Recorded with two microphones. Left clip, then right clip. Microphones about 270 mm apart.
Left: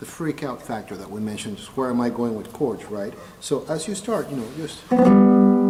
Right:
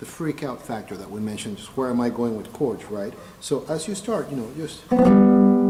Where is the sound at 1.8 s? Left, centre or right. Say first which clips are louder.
Even; centre.